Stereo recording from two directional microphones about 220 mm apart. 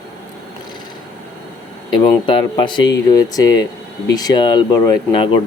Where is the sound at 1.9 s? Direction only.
25° left (ahead or behind).